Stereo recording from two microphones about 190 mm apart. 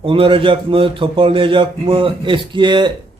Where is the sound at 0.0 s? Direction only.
30° right (ahead or behind).